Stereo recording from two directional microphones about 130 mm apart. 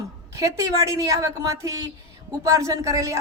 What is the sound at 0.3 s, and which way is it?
Speech, 25° right (ahead or behind).